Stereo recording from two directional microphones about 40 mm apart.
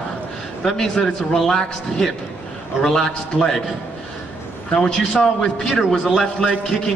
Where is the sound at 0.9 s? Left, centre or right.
Centre.